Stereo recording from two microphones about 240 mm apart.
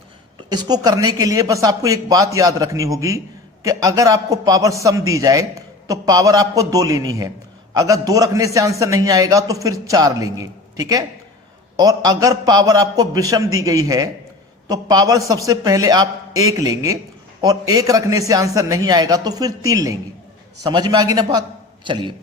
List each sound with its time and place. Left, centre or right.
0.5 s a man's voice: centre